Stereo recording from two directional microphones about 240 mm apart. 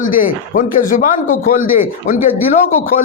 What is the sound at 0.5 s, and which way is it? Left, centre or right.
Speech, left.